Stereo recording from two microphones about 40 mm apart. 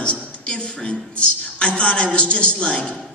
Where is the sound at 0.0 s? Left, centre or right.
Left.